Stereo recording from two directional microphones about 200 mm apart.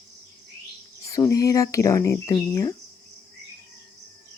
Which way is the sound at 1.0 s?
15° left (ahead or behind).